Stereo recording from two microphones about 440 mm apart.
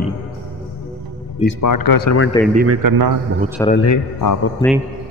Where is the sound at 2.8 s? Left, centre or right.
Right.